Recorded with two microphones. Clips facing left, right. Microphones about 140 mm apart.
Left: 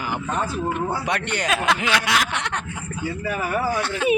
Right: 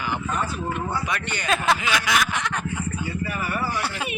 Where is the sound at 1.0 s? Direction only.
75° left (ahead or behind).